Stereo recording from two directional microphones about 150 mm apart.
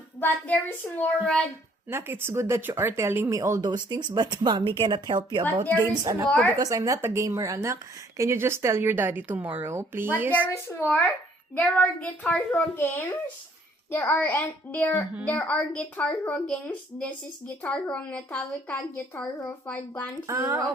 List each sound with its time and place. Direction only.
0.2 s a woman's voice: 10° left (ahead or behind)
1.9 s speech: 15° right (ahead or behind)
10.4 s a woman's voice: 15° left (ahead or behind)
20.2 s speech: 20° right (ahead or behind)